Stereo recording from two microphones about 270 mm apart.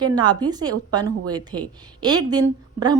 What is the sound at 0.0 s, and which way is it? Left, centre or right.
A woman's voice, centre.